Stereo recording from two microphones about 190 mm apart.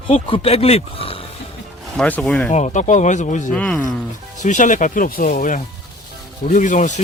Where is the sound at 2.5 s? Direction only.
40° left (ahead or behind).